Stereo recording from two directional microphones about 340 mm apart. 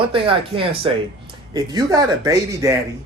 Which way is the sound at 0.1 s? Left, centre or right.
Centre.